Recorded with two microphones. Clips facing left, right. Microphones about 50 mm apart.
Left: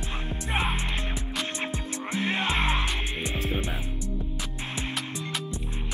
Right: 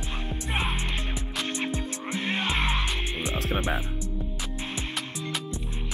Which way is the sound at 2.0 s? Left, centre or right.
Left.